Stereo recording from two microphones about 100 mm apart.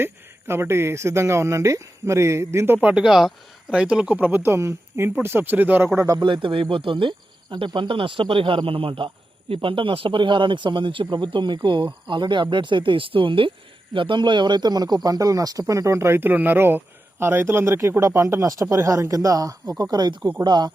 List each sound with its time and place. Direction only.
0.0 s speech: 25° right (ahead or behind)
2.7 s speech: 10° right (ahead or behind)
6.1 s speech: 50° right (ahead or behind)